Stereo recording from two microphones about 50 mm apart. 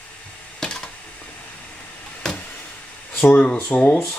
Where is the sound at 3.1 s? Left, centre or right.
Left.